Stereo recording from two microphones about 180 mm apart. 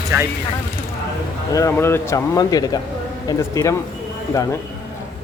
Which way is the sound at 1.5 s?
15° left (ahead or behind).